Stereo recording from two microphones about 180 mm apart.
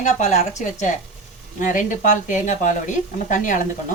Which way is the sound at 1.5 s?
45° left (ahead or behind).